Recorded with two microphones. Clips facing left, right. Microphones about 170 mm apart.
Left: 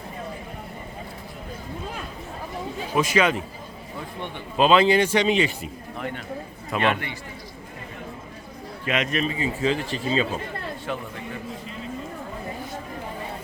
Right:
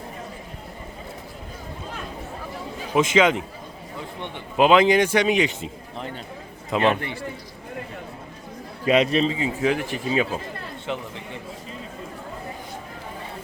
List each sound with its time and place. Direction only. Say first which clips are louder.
2.9 s a man's voice: right 3 dB; 20° right (ahead or behind)
8.9 s a man's voice: right 6 dB; 30° right (ahead or behind); by 10.2 s 15° right (ahead or behind)